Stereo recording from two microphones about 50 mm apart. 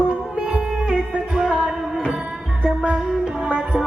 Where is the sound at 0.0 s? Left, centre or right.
Right.